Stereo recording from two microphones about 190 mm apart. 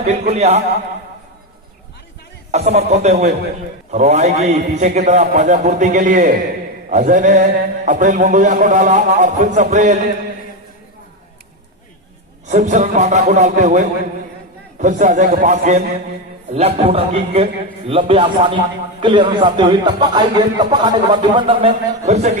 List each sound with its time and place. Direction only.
0.0 s a man's voice: 35° right (ahead or behind)
2.5 s a man's voice: 35° right (ahead or behind)
12.5 s a man's voice: 40° right (ahead or behind)